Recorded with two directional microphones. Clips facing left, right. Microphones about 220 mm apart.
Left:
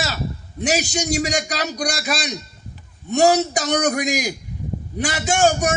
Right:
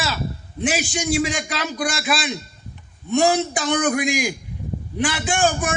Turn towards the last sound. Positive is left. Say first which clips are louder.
# left 3 dB
turn(degrees=40)  # may be behind; listen again after turning